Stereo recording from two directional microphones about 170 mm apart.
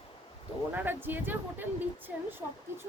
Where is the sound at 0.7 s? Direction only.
10° right (ahead or behind).